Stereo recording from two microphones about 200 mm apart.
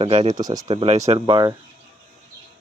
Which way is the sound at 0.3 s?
20° right (ahead or behind).